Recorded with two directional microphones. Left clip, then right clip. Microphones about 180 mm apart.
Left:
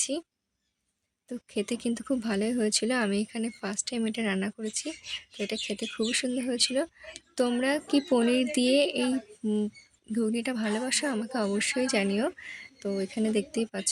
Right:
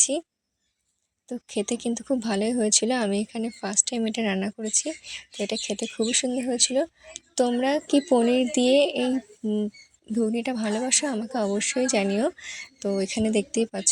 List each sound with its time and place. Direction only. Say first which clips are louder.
0.0 s speech: right 7 dB; 15° right (ahead or behind)
1.3 s speech: right 4 dB; 10° right (ahead or behind)